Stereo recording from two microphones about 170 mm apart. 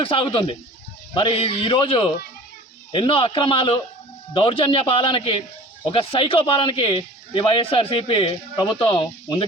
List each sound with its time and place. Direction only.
0.0 s speech: 30° left (ahead or behind)